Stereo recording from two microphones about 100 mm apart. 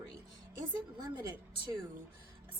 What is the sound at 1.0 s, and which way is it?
Speech, 35° right (ahead or behind).